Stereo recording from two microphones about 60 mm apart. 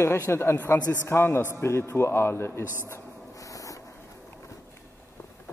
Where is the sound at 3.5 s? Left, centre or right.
Left.